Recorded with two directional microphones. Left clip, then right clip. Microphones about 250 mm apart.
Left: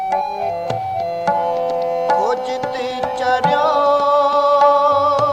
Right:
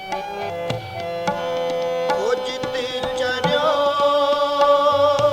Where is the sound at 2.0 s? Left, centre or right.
Left.